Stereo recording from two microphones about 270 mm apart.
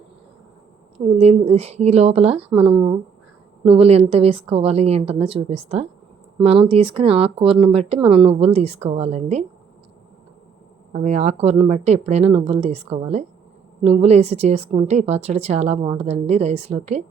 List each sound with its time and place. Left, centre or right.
0.9 s a woman's voice: right
10.9 s a woman's voice: right